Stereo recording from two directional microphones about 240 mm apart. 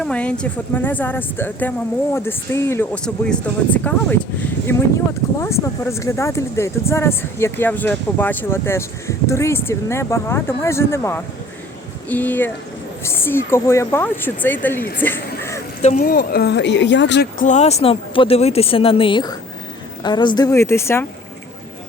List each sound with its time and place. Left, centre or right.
0.0 s speech: centre
5.4 s speech: centre
15.0 s music: centre
15.8 s speech: left; by 21.1 s centre